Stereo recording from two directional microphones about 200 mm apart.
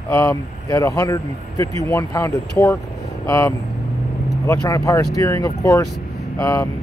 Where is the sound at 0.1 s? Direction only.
15° left (ahead or behind).